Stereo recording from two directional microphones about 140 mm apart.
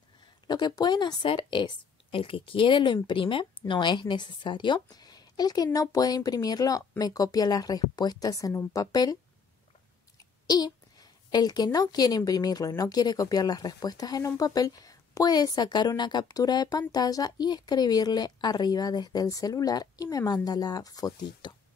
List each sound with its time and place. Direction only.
0.5 s speech: 30° left (ahead or behind)
10.4 s a woman's voice: 30° left (ahead or behind)